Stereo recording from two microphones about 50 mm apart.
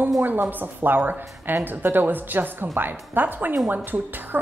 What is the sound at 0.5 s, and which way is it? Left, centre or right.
A woman's voice, right.